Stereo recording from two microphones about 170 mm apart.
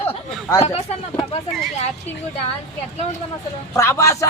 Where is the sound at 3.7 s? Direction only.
15° left (ahead or behind).